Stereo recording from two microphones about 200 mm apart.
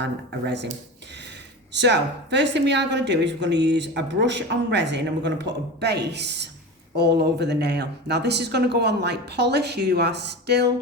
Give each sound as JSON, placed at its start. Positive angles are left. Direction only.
{"t": 0.0, "sound": "speech", "side_deg": -60}
{"t": 1.7, "sound": "speech", "side_deg": -60}